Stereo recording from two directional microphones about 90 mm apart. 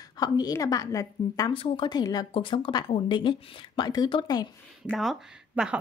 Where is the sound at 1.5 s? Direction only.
80° left.